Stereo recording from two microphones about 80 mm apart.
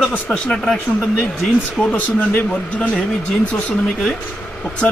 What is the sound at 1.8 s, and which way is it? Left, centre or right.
Speech, centre.